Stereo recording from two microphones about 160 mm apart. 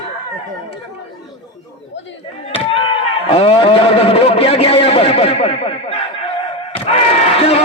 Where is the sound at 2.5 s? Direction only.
35° left (ahead or behind).